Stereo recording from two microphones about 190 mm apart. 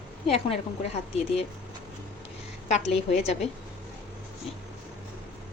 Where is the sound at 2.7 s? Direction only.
35° left (ahead or behind).